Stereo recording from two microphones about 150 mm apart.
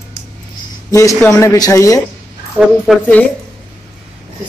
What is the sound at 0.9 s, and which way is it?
A man's voice, 20° left (ahead or behind).